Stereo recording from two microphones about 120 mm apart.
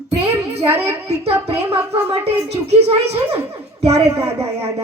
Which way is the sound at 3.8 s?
60° right (ahead or behind).